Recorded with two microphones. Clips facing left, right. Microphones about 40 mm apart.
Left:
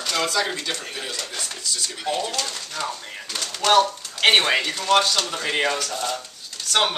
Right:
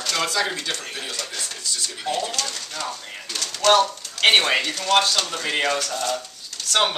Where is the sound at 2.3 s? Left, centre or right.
Centre.